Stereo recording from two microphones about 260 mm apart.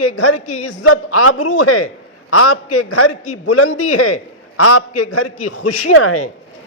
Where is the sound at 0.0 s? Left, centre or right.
Left.